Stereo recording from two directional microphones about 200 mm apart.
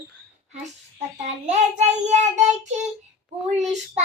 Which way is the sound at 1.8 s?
35° right (ahead or behind).